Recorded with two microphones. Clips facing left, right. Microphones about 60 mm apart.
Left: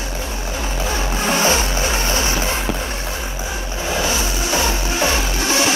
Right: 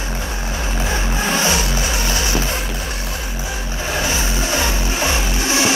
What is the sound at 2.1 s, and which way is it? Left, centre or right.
Music, left.